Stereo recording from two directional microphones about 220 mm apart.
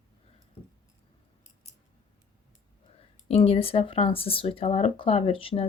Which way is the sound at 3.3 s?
25° left (ahead or behind).